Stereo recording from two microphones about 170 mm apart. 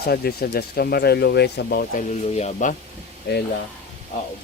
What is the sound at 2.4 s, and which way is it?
Speech, 45° left (ahead or behind).